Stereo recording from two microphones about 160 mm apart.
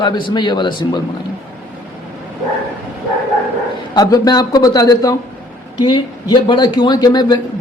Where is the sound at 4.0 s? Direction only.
25° left (ahead or behind).